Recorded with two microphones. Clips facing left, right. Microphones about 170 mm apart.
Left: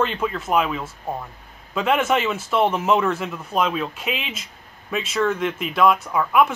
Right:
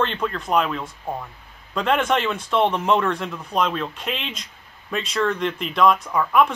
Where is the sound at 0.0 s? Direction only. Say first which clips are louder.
Left 1 dB; 5° left (ahead or behind).